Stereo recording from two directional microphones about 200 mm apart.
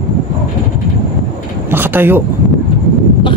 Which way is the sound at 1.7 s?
10° right (ahead or behind).